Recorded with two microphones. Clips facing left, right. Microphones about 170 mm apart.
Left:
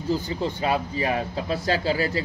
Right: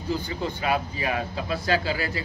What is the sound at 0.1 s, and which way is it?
A man's voice, 30° left (ahead or behind).